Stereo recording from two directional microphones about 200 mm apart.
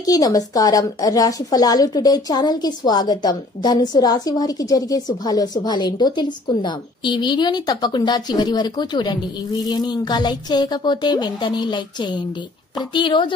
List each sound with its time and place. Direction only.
0.0 s a woman's voice: 20° left (ahead or behind)